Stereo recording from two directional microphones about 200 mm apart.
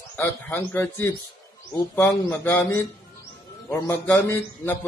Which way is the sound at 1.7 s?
15° left (ahead or behind).